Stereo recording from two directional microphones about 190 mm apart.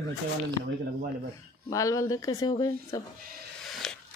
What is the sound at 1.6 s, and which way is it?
Speech, 15° left (ahead or behind).